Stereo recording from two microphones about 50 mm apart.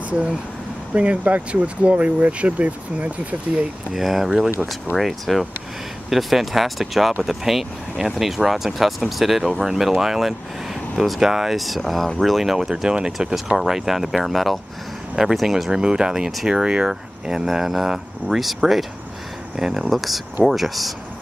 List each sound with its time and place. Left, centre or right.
0.9 s speech: right
3.9 s speech: centre